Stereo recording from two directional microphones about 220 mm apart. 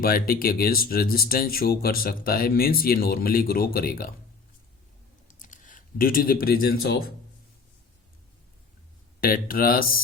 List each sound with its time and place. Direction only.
0.0 s speech: 40° left (ahead or behind)
5.3 s speech: 35° left (ahead or behind)
9.2 s speech: 40° left (ahead or behind)